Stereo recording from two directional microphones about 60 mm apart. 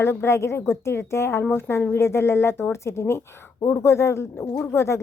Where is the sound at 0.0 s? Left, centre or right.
Left.